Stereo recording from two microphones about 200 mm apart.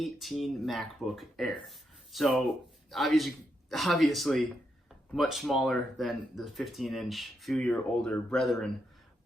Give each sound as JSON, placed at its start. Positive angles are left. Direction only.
{"t": 0.0, "sound": "speech", "side_deg": 0}